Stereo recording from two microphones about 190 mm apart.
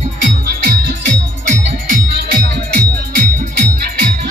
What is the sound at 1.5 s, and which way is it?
Music, 45° right (ahead or behind).